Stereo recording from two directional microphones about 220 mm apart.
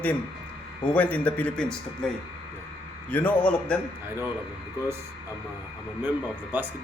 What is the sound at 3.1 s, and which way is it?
Speech, 5° left (ahead or behind).